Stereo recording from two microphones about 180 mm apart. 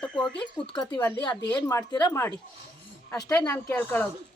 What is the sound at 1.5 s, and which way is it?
Speech, 20° left (ahead or behind).